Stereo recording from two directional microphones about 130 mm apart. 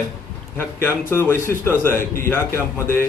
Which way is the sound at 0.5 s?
15° left (ahead or behind).